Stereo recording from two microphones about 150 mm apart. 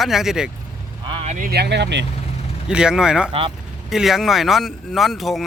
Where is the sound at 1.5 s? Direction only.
90° right.